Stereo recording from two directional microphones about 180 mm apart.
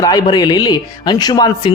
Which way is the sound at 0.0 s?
20° left (ahead or behind).